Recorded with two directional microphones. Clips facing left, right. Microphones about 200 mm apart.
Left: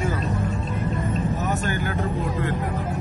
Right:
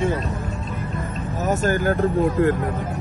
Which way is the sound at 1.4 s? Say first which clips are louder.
Right 5 dB; 40° right (ahead or behind).